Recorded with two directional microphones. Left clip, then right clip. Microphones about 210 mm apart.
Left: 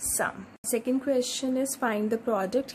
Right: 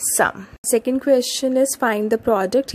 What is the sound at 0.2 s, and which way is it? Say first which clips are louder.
Speech: right 12 dB; 35° right (ahead or behind).